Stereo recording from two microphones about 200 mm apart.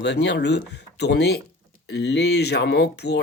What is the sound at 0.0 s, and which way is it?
Speech, 60° left (ahead or behind).